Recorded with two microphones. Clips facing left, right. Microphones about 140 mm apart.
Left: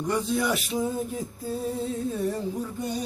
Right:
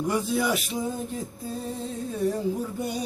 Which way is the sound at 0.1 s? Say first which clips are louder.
Left 1 dB; 5° right (ahead or behind).